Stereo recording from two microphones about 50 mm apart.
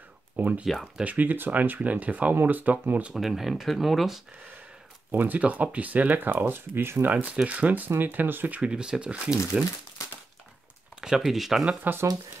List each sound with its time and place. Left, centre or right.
0.4 s speech: right
3.2 s speech: centre
5.1 s speech: right
5.4 s speech: right
7.1 s speech: right
8.5 s speech: centre
11.0 s speech: centre
11.9 s speech: right